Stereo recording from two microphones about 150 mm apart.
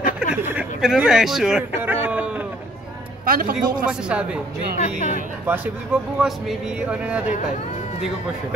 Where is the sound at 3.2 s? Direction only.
70° right (ahead or behind).